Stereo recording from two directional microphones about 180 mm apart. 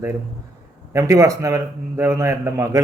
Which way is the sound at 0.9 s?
15° right (ahead or behind).